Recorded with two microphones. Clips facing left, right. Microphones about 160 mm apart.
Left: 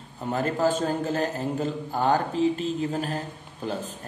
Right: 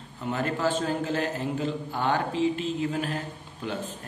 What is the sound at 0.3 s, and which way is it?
Speech, 40° left (ahead or behind).